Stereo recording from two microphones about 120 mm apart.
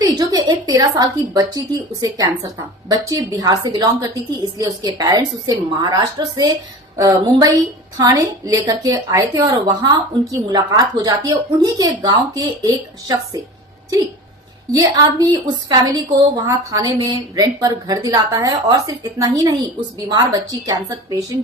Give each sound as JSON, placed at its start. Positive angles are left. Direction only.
{"t": 0.0, "sound": "a woman's voice", "side_deg": -35}
{"t": 14.7, "sound": "a woman's voice", "side_deg": -30}